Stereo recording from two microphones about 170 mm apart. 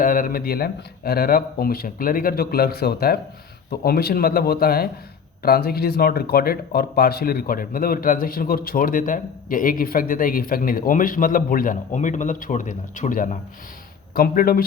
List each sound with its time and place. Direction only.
0.0 s speech: 55° left (ahead or behind)